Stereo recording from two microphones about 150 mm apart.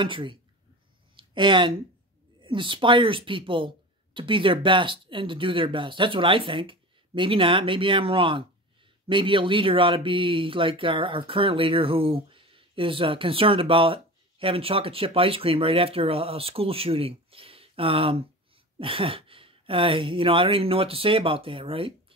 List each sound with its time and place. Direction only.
0.0 s speech: 35° right (ahead or behind)
1.1 s a sound: 35° right (ahead or behind)
2.4 s speech: 35° right (ahead or behind)